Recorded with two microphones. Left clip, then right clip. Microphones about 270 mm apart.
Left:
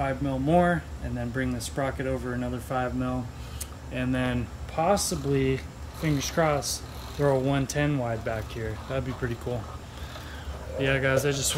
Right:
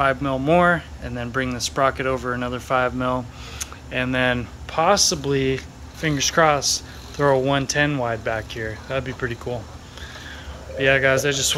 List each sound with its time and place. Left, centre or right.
0.0 s speech: centre
10.8 s speech: centre